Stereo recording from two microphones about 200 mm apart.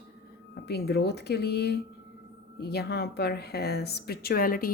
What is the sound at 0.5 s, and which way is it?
A woman's voice, 55° left (ahead or behind).